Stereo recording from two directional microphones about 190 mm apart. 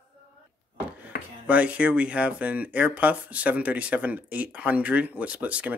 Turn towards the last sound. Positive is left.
turn(degrees=-5)  # may be behind; listen again after turning